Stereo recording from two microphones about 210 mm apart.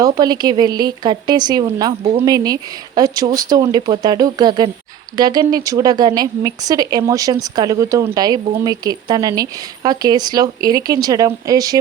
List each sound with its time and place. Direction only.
0.0 s speech: 20° right (ahead or behind)